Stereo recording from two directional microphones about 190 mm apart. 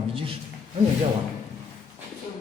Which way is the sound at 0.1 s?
30° right (ahead or behind).